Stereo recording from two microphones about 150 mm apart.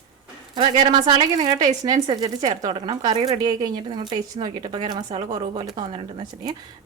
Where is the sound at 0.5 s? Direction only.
30° right (ahead or behind).